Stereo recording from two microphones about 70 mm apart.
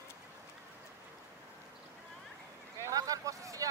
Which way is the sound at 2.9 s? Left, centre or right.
Right.